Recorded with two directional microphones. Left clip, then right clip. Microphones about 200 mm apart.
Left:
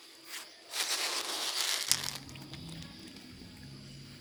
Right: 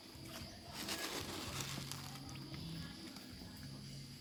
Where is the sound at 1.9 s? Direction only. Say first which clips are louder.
Left 18 dB; 35° left (ahead or behind).